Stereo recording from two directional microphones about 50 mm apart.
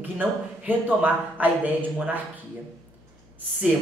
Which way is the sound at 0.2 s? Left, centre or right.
Right.